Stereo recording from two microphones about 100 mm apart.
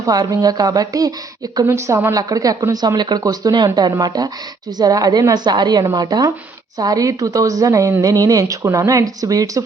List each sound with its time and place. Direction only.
0.0 s a woman's voice: 40° right (ahead or behind)
2.1 s a woman's voice: 35° right (ahead or behind)